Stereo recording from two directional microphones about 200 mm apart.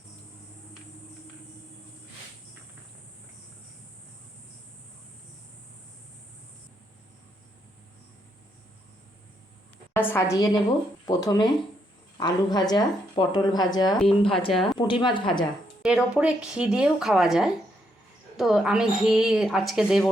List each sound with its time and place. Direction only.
9.9 s a woman's voice: 10° left (ahead or behind)
14.5 s speech: centre (ahead or behind)
15.0 s speech: 25° left (ahead or behind)
15.8 s speech: 5° right (ahead or behind)